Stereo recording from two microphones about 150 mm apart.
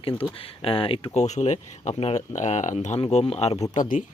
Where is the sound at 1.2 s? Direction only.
50° left (ahead or behind).